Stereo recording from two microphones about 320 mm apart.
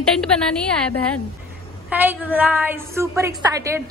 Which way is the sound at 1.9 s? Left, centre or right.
Centre.